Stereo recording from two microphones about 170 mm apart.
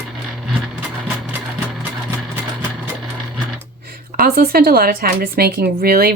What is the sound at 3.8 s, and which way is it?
A woman's voice, 60° right (ahead or behind).